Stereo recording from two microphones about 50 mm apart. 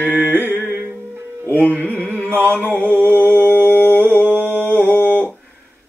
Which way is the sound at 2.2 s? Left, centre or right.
Right.